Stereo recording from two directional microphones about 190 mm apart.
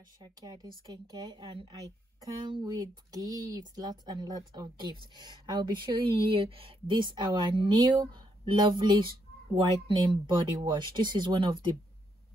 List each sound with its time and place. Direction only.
0.2 s speech: 20° right (ahead or behind)